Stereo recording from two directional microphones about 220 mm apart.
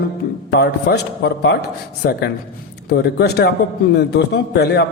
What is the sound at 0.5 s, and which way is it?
A man's voice, 45° left (ahead or behind).